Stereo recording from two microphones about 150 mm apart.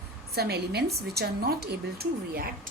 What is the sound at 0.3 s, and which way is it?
A woman's voice, 90° right.